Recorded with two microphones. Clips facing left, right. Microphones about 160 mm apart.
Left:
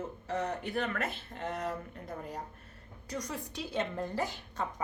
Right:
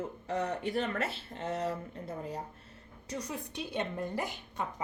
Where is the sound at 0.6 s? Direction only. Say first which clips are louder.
Right 2 dB; 30° right (ahead or behind).